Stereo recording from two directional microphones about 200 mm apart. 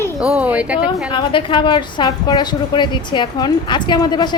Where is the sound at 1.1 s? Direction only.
25° left (ahead or behind).